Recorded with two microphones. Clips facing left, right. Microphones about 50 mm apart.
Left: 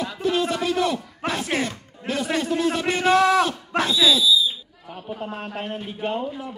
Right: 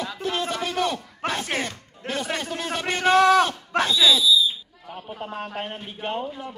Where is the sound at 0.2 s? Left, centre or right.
Right.